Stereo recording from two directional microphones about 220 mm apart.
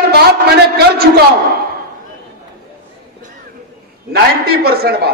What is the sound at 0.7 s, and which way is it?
Speech, 45° right (ahead or behind).